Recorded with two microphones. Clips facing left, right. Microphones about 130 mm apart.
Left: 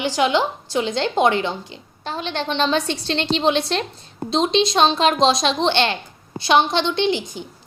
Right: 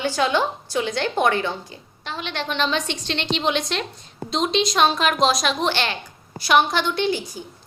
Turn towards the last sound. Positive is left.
turn(degrees=20)  # may be behind; listen again after turning